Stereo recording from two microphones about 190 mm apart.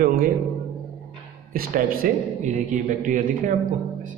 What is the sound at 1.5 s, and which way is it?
A man's voice, 50° right (ahead or behind).